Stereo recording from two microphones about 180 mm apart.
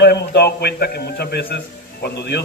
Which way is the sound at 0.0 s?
65° left (ahead or behind).